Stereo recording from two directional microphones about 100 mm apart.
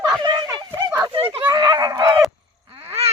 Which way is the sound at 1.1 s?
65° right (ahead or behind).